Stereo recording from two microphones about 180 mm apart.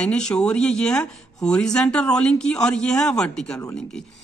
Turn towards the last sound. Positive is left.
turn(degrees=5)  # may be behind; listen again after turning